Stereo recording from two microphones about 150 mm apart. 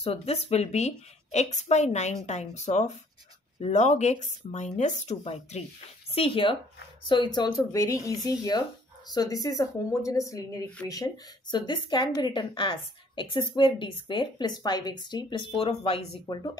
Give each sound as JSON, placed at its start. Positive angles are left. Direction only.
{"t": 0.0, "sound": "a woman's voice", "side_deg": 40}